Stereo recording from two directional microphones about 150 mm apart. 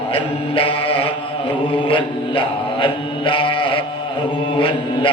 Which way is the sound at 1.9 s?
35° left (ahead or behind).